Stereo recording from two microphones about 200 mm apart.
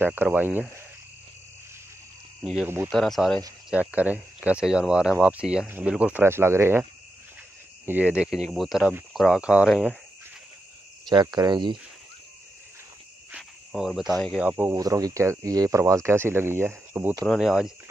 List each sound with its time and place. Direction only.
0.0 s speech: 10° right (ahead or behind)
2.5 s speech: 10° right (ahead or behind)
2.9 s speech: centre (ahead or behind)
11.1 s cricket: 20° right (ahead or behind)
13.3 s speech: centre (ahead or behind)
14.5 s speech: 15° right (ahead or behind)
17.2 s speech: centre (ahead or behind)